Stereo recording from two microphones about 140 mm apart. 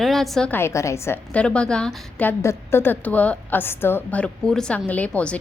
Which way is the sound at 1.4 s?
5° left (ahead or behind).